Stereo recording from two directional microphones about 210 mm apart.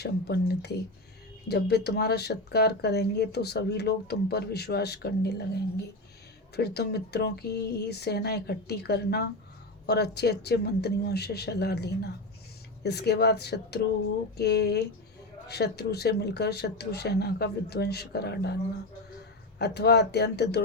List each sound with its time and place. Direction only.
0.0 s speech: 50° left (ahead or behind)
6.6 s speech: 50° left (ahead or behind)
19.5 s speech: 50° left (ahead or behind)